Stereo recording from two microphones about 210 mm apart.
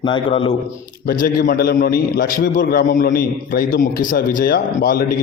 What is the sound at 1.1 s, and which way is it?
A man's voice, 45° left (ahead or behind).